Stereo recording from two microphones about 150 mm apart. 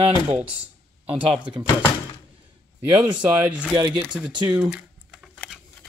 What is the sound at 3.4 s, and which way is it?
Speech, 5° right (ahead or behind).